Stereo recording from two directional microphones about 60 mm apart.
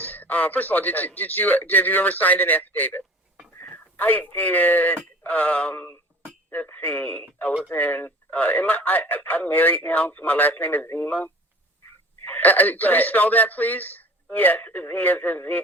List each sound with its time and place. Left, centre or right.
0.0 s speech: left